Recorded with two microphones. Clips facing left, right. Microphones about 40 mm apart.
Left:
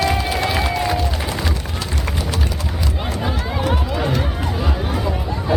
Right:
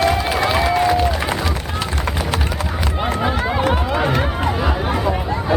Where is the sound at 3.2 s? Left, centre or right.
Right.